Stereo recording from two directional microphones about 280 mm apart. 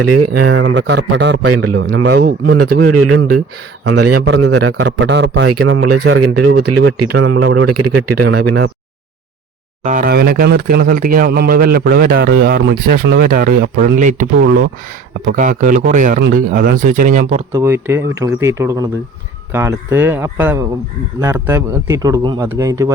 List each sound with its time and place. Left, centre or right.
0.0 s a man's voice: right
2.1 s speech: right
2.6 s a man's voice: right
4.8 s speech: right
5.5 s a man's voice: right
6.0 s a man's voice: right
9.8 s speech: right
17.5 s a man's voice: centre